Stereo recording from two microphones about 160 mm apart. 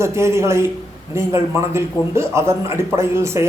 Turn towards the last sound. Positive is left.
turn(degrees=-15)  # may be behind; listen again after turning